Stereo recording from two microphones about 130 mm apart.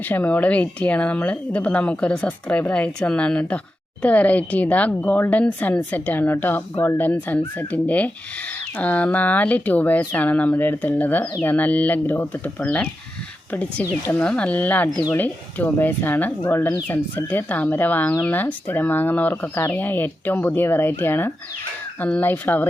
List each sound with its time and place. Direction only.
0.0 s speech: 15° left (ahead or behind)